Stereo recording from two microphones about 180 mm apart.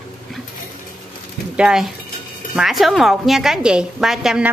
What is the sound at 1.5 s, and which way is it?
A woman's voice, 5° right (ahead or behind).